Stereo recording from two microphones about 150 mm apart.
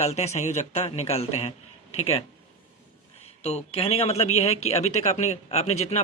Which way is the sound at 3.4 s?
40° left (ahead or behind).